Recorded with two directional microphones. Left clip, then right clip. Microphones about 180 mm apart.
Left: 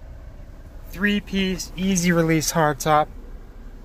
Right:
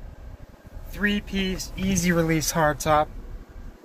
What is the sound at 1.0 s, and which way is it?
Speech, 35° left (ahead or behind).